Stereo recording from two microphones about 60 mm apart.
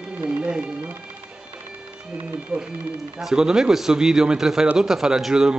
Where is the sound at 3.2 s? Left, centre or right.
Centre.